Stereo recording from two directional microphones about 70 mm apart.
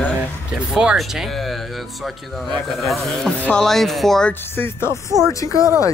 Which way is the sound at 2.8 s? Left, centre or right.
Centre.